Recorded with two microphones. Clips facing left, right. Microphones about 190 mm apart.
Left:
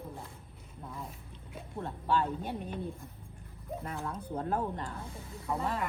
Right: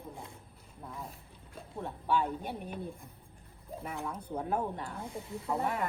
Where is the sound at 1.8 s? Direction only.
10° right (ahead or behind).